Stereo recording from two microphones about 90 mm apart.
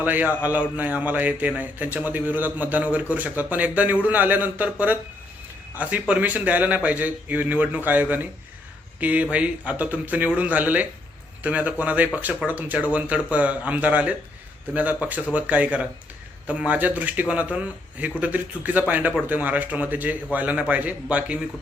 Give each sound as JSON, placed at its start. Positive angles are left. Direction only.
{"t": 0.0, "sound": "a man's voice", "side_deg": -20}